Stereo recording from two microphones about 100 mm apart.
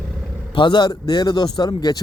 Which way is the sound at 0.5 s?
50° left (ahead or behind).